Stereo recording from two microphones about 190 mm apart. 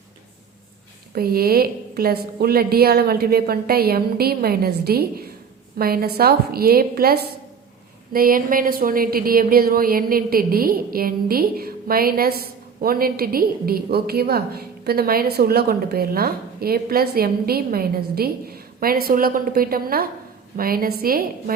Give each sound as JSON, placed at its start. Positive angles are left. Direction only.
{"t": 1.1, "sound": "a woman's voice", "side_deg": -55}